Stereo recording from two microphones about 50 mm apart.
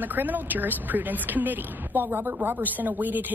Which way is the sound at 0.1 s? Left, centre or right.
Right.